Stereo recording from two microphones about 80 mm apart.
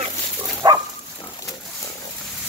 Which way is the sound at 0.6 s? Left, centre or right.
Right.